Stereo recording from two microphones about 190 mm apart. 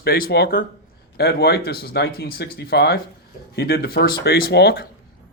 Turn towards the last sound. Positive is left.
turn(degrees=60)  # may be behind; listen again after turning